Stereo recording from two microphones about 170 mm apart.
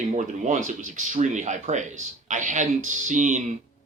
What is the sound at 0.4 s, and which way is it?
Speech, 45° right (ahead or behind).